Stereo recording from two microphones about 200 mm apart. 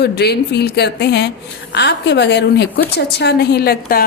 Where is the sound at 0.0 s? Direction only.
55° left (ahead or behind).